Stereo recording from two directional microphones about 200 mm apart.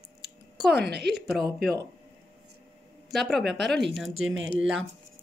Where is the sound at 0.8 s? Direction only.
55° right (ahead or behind).